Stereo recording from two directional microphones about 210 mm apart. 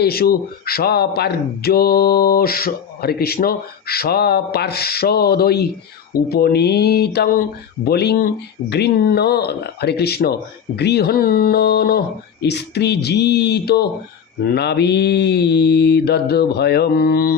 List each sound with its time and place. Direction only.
0.0 s speech: 45° left (ahead or behind)